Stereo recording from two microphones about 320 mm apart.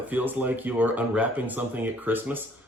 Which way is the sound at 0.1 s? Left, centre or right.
Centre.